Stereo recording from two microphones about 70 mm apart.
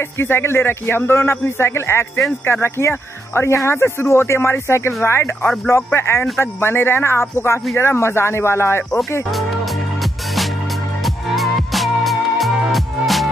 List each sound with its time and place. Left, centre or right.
0.2 s speech: left
11.3 s music: centre